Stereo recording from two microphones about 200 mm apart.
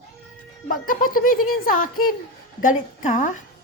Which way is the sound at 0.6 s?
45° left (ahead or behind).